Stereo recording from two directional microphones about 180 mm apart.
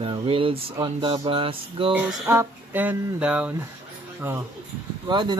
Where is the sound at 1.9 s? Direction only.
10° right (ahead or behind).